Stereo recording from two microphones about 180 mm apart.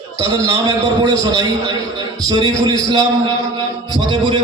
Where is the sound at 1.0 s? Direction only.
20° right (ahead or behind).